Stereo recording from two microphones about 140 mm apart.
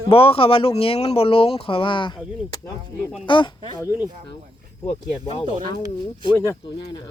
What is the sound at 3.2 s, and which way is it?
Speech, 35° left (ahead or behind).